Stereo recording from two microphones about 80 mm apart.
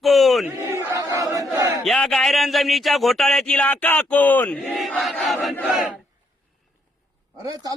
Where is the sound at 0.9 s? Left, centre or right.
Right.